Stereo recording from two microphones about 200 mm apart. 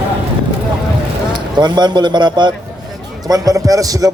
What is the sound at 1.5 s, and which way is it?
A man's voice, 20° right (ahead or behind).